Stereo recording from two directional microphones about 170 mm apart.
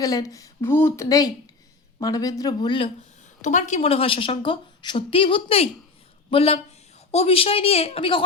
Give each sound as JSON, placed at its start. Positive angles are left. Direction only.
{"t": 0.0, "sound": "speech", "side_deg": 20}
{"t": 3.4, "sound": "a woman's voice", "side_deg": 45}